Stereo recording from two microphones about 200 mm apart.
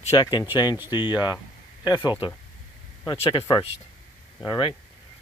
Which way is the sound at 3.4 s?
15° left (ahead or behind).